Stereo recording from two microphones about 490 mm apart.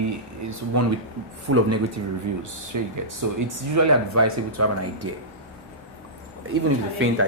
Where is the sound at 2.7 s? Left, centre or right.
Right.